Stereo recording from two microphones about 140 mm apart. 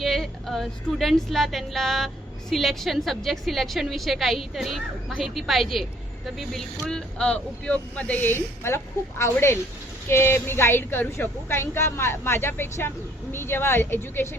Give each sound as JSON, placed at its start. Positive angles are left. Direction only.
{"t": 0.0, "sound": "a woman's voice", "side_deg": 0}